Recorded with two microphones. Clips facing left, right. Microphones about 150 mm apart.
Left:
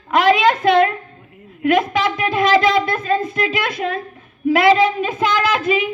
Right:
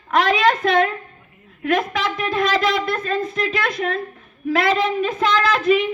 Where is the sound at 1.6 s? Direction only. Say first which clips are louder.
Left 4 dB; centre (ahead or behind).